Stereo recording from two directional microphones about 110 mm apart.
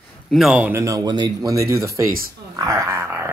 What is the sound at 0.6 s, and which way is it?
Speech, 25° right (ahead or behind).